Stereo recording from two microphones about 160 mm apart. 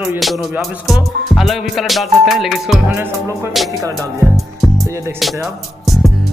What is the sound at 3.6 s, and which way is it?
Music, centre (ahead or behind).